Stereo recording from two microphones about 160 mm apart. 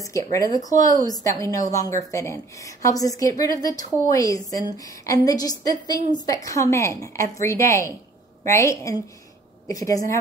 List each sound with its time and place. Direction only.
0.0 s a woman's voice: 20° left (ahead or behind)